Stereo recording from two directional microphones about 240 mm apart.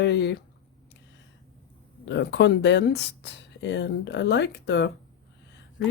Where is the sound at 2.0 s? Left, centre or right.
Left.